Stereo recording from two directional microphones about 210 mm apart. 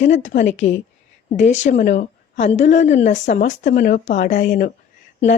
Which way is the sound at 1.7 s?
35° left (ahead or behind).